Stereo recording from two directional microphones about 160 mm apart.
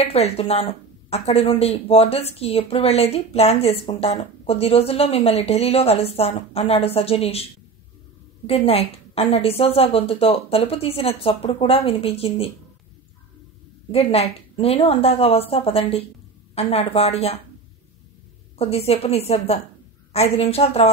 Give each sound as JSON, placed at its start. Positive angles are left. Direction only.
{"t": 0.0, "sound": "speech", "side_deg": 40}
{"t": 8.5, "sound": "speech", "side_deg": 40}
{"t": 13.9, "sound": "speech", "side_deg": 40}
{"t": 18.6, "sound": "speech", "side_deg": 40}